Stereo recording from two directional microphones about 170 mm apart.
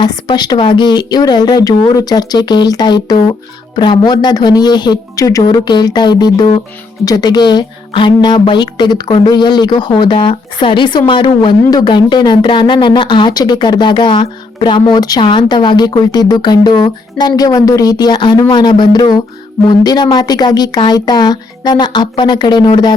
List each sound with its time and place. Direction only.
0.0 s speech: 25° left (ahead or behind)